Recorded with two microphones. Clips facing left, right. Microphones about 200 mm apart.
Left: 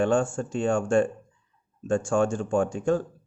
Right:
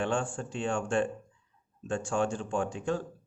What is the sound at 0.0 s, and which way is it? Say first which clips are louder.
Speech: left 8 dB; 45° left (ahead or behind).